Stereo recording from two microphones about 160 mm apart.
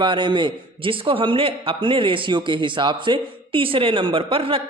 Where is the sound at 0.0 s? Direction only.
30° right (ahead or behind).